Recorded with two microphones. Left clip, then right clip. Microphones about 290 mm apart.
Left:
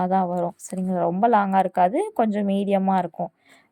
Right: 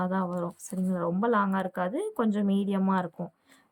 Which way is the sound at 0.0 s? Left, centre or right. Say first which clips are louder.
Left 9 dB; centre.